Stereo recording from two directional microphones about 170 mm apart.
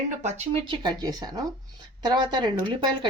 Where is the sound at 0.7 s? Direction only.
25° right (ahead or behind).